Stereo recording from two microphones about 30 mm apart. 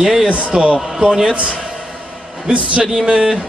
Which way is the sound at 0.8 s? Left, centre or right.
Centre.